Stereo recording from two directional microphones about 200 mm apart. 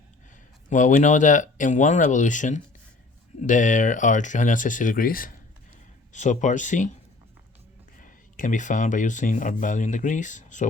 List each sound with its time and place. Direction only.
0.7 s speech: 40° left (ahead or behind)
7.9 s speech: 40° left (ahead or behind)